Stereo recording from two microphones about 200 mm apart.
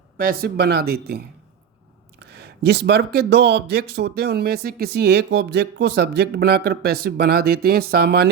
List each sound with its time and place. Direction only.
0.3 s speech: 50° right (ahead or behind)
2.3 s speech: 55° right (ahead or behind)